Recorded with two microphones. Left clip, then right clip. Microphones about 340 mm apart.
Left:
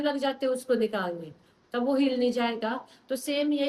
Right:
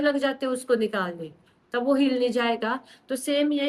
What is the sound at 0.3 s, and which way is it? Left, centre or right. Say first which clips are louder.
Speech: right 2 dB; centre.